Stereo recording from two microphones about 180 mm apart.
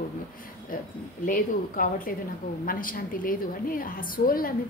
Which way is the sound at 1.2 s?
50° left (ahead or behind).